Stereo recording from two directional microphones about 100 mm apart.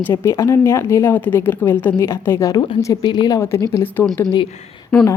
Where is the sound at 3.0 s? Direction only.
45° left (ahead or behind).